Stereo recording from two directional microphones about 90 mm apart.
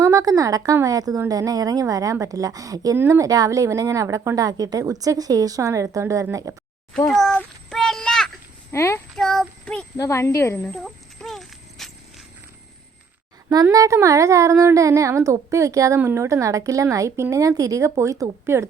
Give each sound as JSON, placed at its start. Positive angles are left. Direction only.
{"t": 0.0, "sound": "a woman's voice", "side_deg": -40}
{"t": 7.1, "sound": "a sound", "side_deg": 10}
{"t": 8.7, "sound": "speech", "side_deg": 30}
{"t": 9.1, "sound": "child singing", "side_deg": 5}
{"t": 10.0, "sound": "speech", "side_deg": 30}
{"t": 10.7, "sound": "music", "side_deg": 5}
{"t": 13.7, "sound": "a woman's voice", "side_deg": -35}